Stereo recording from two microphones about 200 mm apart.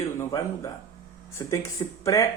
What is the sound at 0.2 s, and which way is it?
Speech, 15° left (ahead or behind).